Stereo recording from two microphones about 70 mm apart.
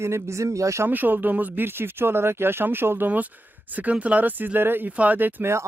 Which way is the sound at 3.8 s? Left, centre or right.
Right.